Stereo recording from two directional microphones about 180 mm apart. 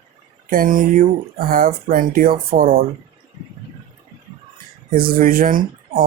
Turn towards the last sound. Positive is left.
turn(degrees=-50)  # may be behind; listen again after turning